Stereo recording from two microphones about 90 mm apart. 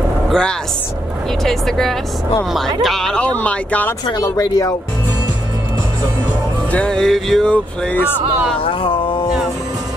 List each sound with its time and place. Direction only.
0.3 s speech: 10° left (ahead or behind)
4.0 s speech: 50° left (ahead or behind)
6.7 s speech: 10° left (ahead or behind)
7.5 s speech: 15° left (ahead or behind)
8.6 s a sound: 80° left